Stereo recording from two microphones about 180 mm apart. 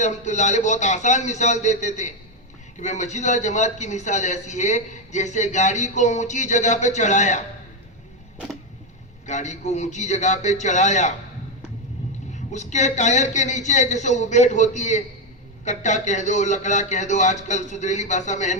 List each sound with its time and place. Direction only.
0.0 s a man's voice: 40° left (ahead or behind)
9.2 s a man's voice: 40° left (ahead or behind)
12.3 s a man's voice: 40° left (ahead or behind)